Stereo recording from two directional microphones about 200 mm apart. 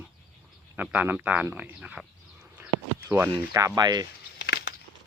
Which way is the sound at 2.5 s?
10° right (ahead or behind).